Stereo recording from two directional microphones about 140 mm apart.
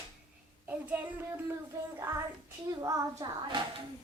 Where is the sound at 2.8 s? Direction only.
25° right (ahead or behind).